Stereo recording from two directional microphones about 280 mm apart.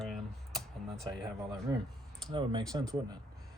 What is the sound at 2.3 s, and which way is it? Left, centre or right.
Speech, centre.